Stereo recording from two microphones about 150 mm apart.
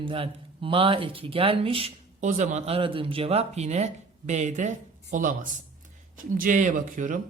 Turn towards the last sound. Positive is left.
turn(degrees=-60)  # may be behind; listen again after turning